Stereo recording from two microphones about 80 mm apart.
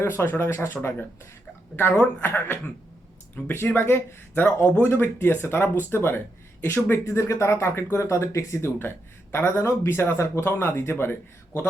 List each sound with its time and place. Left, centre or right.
0.0 s speech: left